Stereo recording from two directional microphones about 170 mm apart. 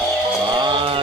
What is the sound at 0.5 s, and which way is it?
Mantra, 25° right (ahead or behind).